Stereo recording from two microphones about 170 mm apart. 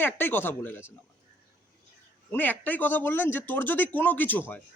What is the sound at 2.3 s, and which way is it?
Speech, 10° left (ahead or behind).